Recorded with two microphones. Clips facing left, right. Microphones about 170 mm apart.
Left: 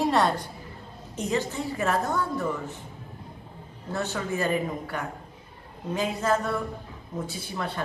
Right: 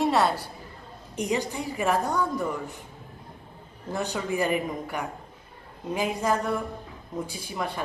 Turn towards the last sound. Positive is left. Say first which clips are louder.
# right 1 dB
turn(degrees=-10)  # may be behind; listen again after turning